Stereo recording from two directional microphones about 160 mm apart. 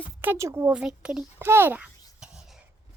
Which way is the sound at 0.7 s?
5° right (ahead or behind).